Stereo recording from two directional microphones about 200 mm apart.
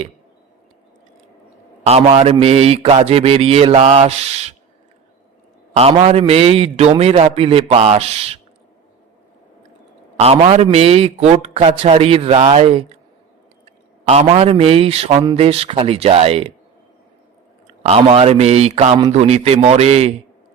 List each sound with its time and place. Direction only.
1.9 s mantra: 30° right (ahead or behind)
5.7 s mantra: 30° right (ahead or behind)
10.2 s a man's voice: 30° right (ahead or behind)
14.1 s a man's voice: 30° right (ahead or behind)
17.8 s mantra: 30° right (ahead or behind)